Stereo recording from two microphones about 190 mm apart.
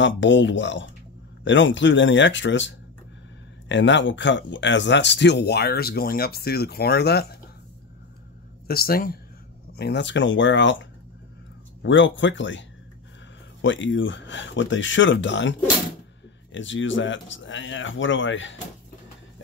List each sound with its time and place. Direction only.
0.0 s speech: 75° left (ahead or behind); by 7.2 s 60° left (ahead or behind)
8.6 s speech: 55° left (ahead or behind)
9.8 s speech: 65° left (ahead or behind)
16.5 s speech: 80° left